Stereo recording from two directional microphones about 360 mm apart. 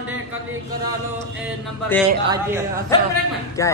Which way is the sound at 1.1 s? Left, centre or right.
Centre.